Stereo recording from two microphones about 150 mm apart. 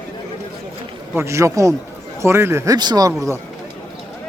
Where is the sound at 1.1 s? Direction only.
20° right (ahead or behind).